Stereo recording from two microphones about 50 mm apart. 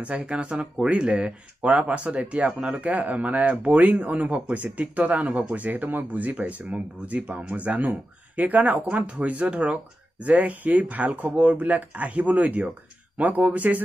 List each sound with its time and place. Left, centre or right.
0.0 s speech: right